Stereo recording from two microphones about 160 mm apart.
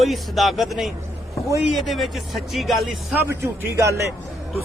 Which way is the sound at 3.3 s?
15° right (ahead or behind).